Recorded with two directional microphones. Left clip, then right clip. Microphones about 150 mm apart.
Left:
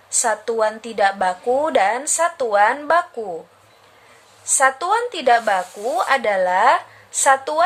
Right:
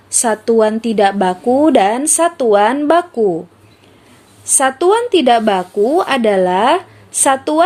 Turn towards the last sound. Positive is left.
turn(degrees=-35)  # may be behind; listen again after turning